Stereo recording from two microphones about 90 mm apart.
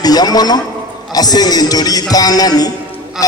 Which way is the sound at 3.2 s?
5° right (ahead or behind).